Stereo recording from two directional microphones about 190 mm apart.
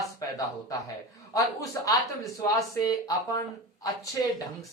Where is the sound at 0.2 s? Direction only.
20° left (ahead or behind).